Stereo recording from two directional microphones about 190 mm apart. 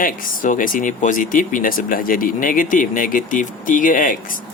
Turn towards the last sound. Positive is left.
turn(degrees=45)  # may be behind; listen again after turning